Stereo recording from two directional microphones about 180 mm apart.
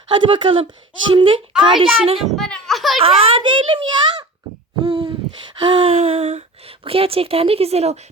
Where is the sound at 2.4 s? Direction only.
5° left (ahead or behind).